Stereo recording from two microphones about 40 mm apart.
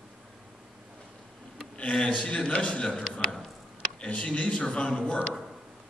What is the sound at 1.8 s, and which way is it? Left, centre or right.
A man's voice, left.